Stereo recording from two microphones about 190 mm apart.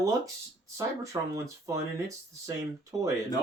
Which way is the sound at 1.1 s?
15° right (ahead or behind).